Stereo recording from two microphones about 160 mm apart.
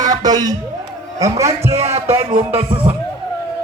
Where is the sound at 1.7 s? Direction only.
40° right (ahead or behind).